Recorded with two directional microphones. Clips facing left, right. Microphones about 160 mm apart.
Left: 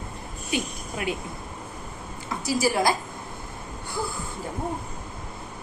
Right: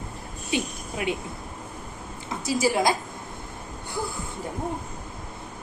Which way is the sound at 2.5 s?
20° right (ahead or behind).